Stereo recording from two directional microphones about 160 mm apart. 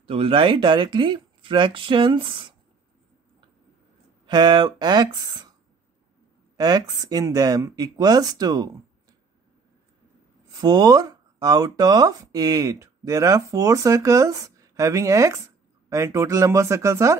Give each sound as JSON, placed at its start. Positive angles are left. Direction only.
{"t": 0.0, "sound": "speech", "side_deg": -35}
{"t": 4.3, "sound": "speech", "side_deg": -30}
{"t": 6.5, "sound": "speech", "side_deg": -25}
{"t": 10.6, "sound": "speech", "side_deg": -25}